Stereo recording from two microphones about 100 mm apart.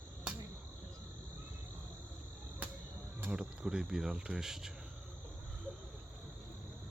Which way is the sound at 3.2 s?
10° right (ahead or behind).